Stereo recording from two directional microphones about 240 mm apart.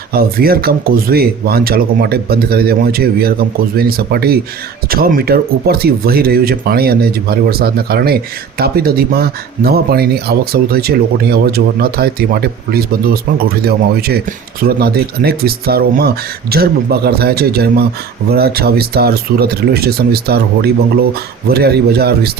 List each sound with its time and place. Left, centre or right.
0.1 s speech: right